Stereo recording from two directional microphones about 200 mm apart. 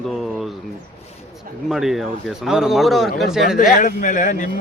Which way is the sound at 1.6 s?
Centre (ahead or behind).